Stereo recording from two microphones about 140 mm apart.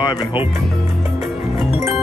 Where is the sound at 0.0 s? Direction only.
35° left (ahead or behind).